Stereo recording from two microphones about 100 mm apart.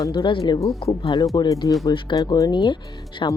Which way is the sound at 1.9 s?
55° left (ahead or behind).